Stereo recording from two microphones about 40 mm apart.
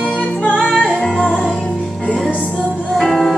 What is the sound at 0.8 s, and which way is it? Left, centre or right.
Music, centre.